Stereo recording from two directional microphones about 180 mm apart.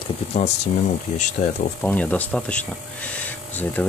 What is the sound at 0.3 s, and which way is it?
Speech, 35° left (ahead or behind).